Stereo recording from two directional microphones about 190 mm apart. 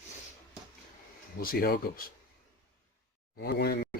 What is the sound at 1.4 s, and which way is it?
Speech, 55° left (ahead or behind).